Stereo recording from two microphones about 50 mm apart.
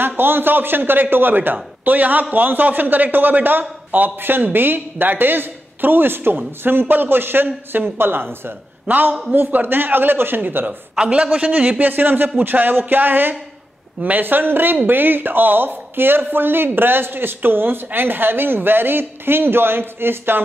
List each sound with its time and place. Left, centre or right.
0.2 s speech: right
11.0 s a man's voice: right
11.8 s speech: right